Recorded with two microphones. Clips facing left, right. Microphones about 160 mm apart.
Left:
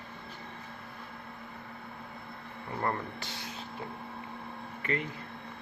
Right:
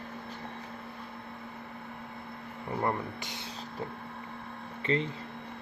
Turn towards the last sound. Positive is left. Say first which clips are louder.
# right 4 dB
turn(degrees=-25)  # may be behind; listen again after turning